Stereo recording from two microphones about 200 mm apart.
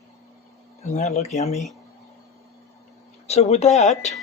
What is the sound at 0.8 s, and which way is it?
Speech, 35° left (ahead or behind).